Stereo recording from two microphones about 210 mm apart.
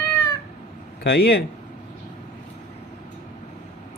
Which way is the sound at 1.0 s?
50° left (ahead or behind).